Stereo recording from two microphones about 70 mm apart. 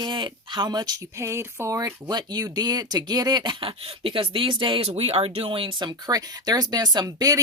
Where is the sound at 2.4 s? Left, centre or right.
Right.